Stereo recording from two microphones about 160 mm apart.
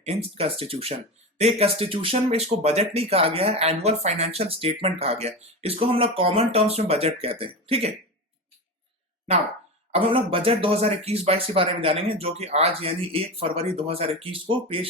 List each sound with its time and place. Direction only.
0.0 s speech: 40° right (ahead or behind)
9.9 s speech: 35° right (ahead or behind)